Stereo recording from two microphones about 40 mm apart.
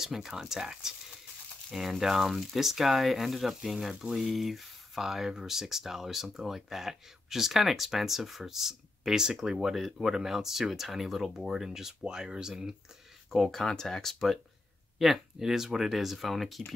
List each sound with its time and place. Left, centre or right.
0.0 s speech: centre
13.3 s speech: centre
15.0 s speech: centre